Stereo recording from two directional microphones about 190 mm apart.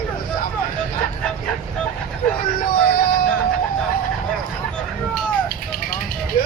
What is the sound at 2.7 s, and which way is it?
Music, 50° left (ahead or behind).